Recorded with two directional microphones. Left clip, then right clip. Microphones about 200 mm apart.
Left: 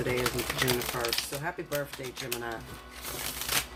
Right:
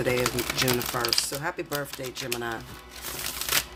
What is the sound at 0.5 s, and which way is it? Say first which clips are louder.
Speech: right 3 dB; 50° right (ahead or behind).